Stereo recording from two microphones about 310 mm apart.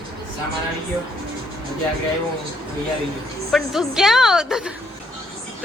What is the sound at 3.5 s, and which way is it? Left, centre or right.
Speech, centre.